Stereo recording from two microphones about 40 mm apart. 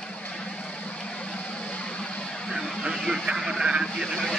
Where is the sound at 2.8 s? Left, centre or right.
Centre.